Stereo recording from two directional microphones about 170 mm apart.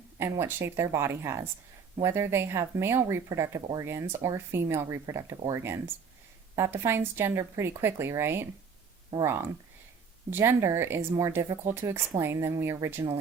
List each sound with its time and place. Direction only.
0.2 s speech: 15° right (ahead or behind)